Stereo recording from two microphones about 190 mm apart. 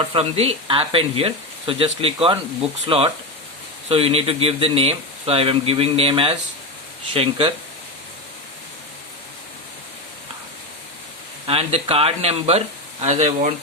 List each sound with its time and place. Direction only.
0.1 s speech: 30° right (ahead or behind)
11.4 s speech: 30° right (ahead or behind)